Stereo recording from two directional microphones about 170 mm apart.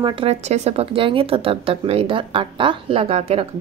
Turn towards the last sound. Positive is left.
turn(degrees=-35)  # may be behind; listen again after turning